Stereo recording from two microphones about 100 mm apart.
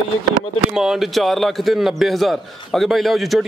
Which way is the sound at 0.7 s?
5° right (ahead or behind).